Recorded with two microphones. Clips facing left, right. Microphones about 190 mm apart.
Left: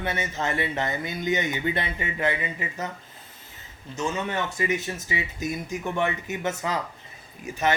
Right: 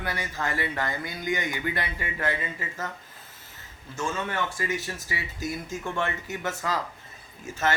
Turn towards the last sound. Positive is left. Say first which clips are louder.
# left 2 dB
turn(degrees=15)  # may be behind; listen again after turning